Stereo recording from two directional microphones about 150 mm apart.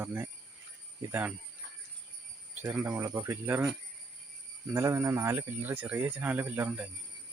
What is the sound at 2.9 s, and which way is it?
Speech, 20° right (ahead or behind).